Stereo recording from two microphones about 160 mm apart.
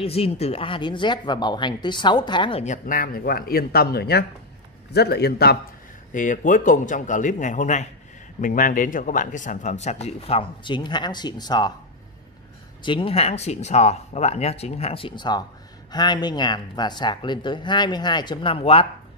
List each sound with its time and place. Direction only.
0.0 s speech: 40° left (ahead or behind)
2.6 s a man's voice: 55° left (ahead or behind); by 5.6 s 85° left
6.1 s speech: 55° left (ahead or behind); by 11.7 s 25° left (ahead or behind)
12.8 s speech: 35° left (ahead or behind)